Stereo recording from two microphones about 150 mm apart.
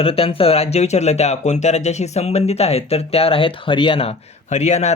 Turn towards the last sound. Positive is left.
turn(degrees=50)  # may be behind; listen again after turning